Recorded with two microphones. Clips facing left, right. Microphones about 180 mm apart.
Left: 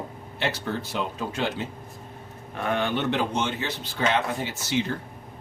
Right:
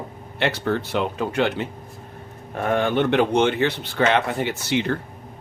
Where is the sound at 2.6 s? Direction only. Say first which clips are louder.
Right 6 dB; 45° right (ahead or behind); by 5.0 s 65° right (ahead or behind).